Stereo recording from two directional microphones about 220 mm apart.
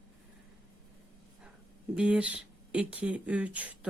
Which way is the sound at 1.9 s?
5° right (ahead or behind).